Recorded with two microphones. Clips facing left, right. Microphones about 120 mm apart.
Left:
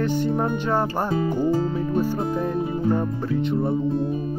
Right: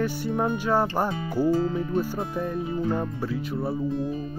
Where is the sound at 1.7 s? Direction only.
35° left (ahead or behind).